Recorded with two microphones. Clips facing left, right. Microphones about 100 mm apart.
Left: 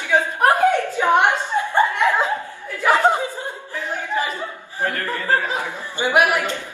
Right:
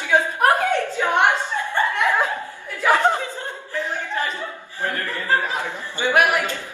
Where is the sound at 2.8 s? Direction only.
15° left (ahead or behind).